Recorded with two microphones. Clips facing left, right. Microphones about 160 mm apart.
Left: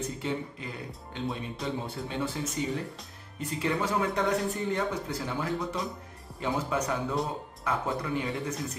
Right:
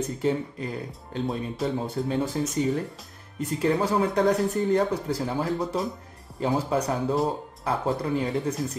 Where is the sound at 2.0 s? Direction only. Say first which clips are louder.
Right 7 dB; 40° right (ahead or behind).